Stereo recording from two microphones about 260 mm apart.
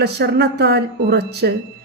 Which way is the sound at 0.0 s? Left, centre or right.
Right.